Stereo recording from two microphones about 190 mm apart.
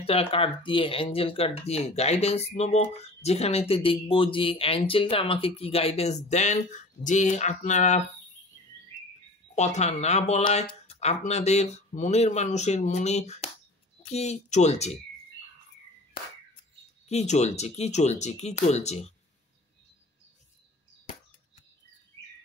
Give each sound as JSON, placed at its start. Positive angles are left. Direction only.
{"t": 0.0, "sound": "speech", "side_deg": 30}
{"t": 9.6, "sound": "speech", "side_deg": 35}
{"t": 17.1, "sound": "speech", "side_deg": 35}